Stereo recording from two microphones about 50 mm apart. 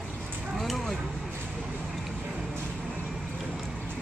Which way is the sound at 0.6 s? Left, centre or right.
Centre.